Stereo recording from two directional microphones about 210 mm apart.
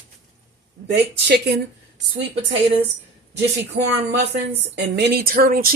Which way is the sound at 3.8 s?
55° right (ahead or behind).